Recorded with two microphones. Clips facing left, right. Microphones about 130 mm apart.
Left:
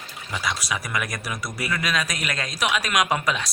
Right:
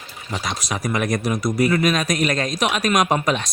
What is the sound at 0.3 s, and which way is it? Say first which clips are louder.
A man's voice: right 1 dB; 40° right (ahead or behind).